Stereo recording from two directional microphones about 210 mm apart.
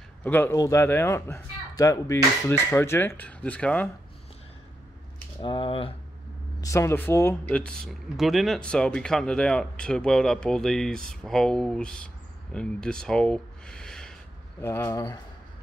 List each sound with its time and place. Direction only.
0.2 s speech: 10° left (ahead or behind)
5.4 s speech: 25° left (ahead or behind)
6.6 s speech: 15° left (ahead or behind)